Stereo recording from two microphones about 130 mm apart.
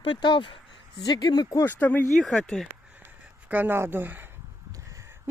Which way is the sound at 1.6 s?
15° left (ahead or behind).